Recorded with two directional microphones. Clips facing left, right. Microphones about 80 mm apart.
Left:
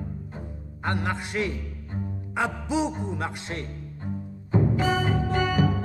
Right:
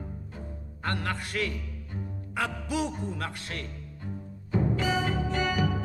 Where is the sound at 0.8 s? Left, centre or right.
Centre.